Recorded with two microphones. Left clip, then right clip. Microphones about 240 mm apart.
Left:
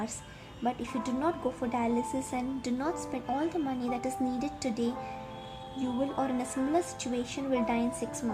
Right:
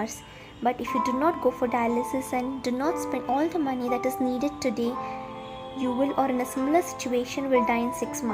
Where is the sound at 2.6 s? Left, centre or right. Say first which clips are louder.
Right 8 dB; centre.